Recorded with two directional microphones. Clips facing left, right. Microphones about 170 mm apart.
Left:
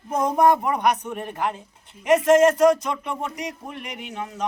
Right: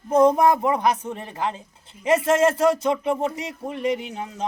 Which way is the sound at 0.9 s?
30° right (ahead or behind).